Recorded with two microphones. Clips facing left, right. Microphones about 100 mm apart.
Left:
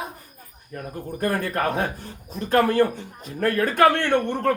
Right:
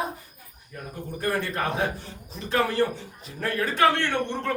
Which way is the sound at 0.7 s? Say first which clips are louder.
Left 4 dB; 50° left (ahead or behind).